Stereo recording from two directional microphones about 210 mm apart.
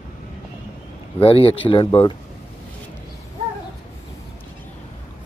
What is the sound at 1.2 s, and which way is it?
Speech, 25° left (ahead or behind).